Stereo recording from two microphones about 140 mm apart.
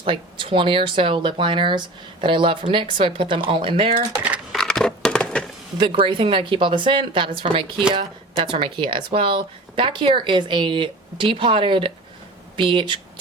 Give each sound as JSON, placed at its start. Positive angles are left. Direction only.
{"t": 0.0, "sound": "speech", "side_deg": -40}
{"t": 4.5, "sound": "a sound", "side_deg": 5}
{"t": 5.7, "sound": "speech", "side_deg": -35}